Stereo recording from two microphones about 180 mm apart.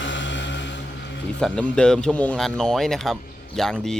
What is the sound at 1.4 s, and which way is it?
Speech, 5° left (ahead or behind).